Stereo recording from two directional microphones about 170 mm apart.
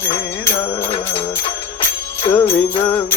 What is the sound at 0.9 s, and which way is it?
Music, 30° left (ahead or behind).